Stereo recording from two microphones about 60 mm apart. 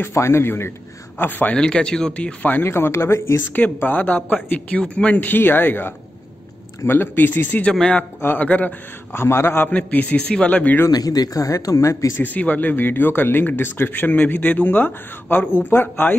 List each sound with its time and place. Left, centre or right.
0.1 s a man's voice: left
1.5 s speech: centre
2.6 s a man's voice: left
3.5 s speech: left
9.1 s a man's voice: left
9.7 s speech: left
10.9 s speech: left
12.4 s speech: left